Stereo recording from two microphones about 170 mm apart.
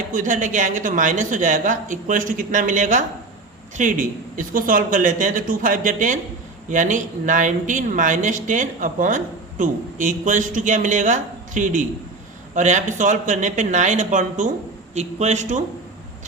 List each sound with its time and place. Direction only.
0.1 s a woman's voice: 50° right (ahead or behind)